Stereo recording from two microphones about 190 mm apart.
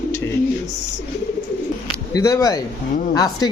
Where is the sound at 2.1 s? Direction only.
15° left (ahead or behind).